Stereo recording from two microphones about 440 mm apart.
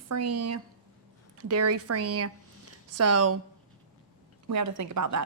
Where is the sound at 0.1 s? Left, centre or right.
Right.